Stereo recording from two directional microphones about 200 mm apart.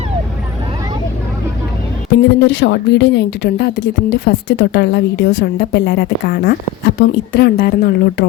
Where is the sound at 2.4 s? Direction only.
65° left (ahead or behind).